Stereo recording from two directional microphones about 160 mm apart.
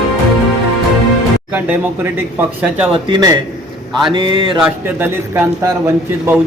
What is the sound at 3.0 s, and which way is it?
Speech, 25° right (ahead or behind).